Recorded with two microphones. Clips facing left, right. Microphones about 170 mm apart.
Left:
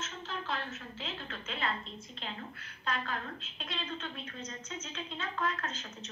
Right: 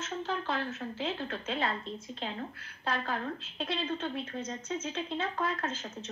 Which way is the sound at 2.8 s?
35° right (ahead or behind).